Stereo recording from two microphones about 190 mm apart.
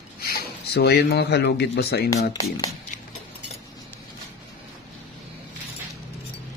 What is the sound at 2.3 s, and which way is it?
Speech, 20° left (ahead or behind).